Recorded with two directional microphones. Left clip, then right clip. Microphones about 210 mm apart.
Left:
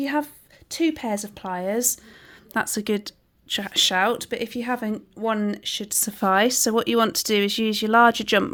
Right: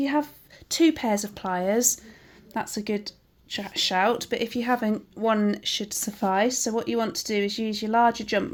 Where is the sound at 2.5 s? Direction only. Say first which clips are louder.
Left 5 dB; 30° left (ahead or behind).